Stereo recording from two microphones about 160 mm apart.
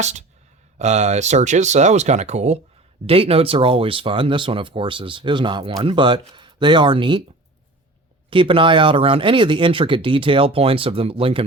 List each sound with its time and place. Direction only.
0.0 s speech: 45° right (ahead or behind); by 7.2 s 30° right (ahead or behind)
8.3 s speech: 35° right (ahead or behind)